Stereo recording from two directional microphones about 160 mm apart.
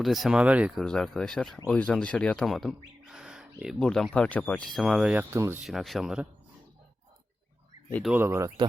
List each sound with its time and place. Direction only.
0.0 s speech: centre (ahead or behind)
0.9 s speech: centre (ahead or behind)
5.3 s speech: 15° right (ahead or behind)
5.6 s speech: centre (ahead or behind)
8.1 s speech: 15° right (ahead or behind)